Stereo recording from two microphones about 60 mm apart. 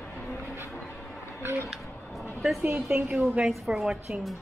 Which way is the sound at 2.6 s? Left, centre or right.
Right.